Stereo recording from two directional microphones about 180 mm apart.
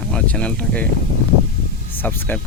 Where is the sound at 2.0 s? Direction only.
10° left (ahead or behind).